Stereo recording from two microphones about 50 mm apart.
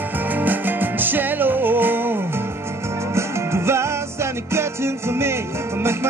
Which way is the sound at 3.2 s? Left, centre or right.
Right.